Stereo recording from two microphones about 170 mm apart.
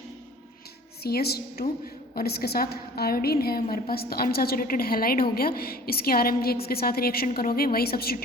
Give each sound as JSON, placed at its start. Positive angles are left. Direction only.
{"t": 1.0, "sound": "a woman's voice", "side_deg": 70}